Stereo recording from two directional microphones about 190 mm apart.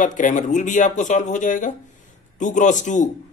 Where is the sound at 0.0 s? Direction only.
45° left (ahead or behind).